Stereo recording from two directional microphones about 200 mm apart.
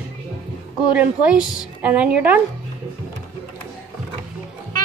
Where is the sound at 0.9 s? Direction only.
5° right (ahead or behind).